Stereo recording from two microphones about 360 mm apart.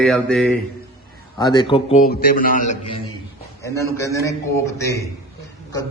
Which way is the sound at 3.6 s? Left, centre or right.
Centre.